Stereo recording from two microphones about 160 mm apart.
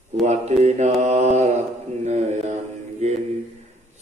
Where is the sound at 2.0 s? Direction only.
45° right (ahead or behind).